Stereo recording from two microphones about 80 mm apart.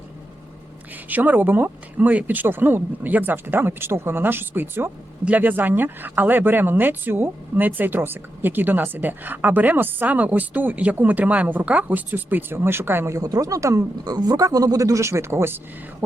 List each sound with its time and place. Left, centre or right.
1.0 s speech: right